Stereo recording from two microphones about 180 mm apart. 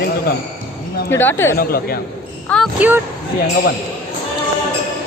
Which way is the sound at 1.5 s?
55° left (ahead or behind).